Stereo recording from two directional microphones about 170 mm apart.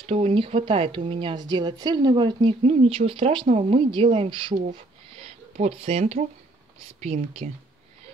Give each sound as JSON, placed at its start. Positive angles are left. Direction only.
{"t": 0.0, "sound": "speech", "side_deg": -35}
{"t": 4.6, "sound": "a sound", "side_deg": -40}
{"t": 7.0, "sound": "speech", "side_deg": -40}